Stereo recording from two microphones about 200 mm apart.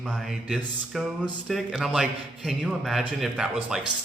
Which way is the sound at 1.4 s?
Centre (ahead or behind).